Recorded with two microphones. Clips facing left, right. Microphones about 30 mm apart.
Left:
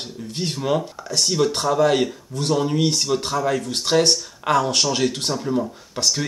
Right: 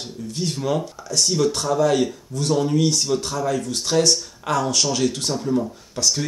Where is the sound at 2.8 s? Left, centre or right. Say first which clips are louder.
Even; left.